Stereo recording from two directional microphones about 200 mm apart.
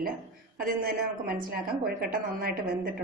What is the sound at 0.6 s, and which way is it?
A woman's voice, 45° right (ahead or behind).